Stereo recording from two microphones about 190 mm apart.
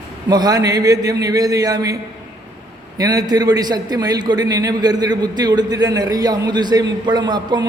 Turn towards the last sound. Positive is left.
turn(degrees=-20)  # may be behind; listen again after turning